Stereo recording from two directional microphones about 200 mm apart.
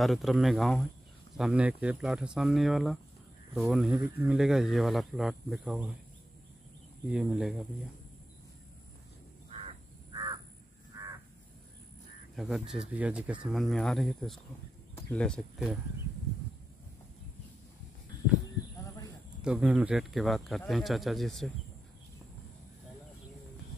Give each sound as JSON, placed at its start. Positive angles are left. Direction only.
{"t": 0.0, "sound": "speech", "side_deg": 0}
{"t": 7.1, "sound": "speech", "side_deg": -5}
{"t": 9.5, "sound": "crow", "side_deg": -30}
{"t": 12.4, "sound": "speech", "side_deg": 0}
{"t": 18.4, "sound": "a sound", "side_deg": 15}
{"t": 19.4, "sound": "speech", "side_deg": -5}